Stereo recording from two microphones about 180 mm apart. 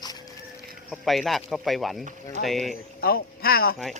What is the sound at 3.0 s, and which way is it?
Speech, 55° left (ahead or behind).